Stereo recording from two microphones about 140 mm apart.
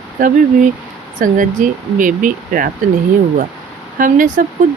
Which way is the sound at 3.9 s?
70° right (ahead or behind).